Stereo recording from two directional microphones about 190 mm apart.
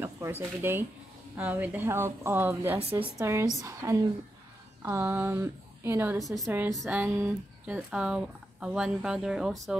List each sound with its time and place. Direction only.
0.0 s a woman's voice: 10° right (ahead or behind)
6.1 s speech: centre (ahead or behind)
6.4 s a woman's voice: 10° right (ahead or behind)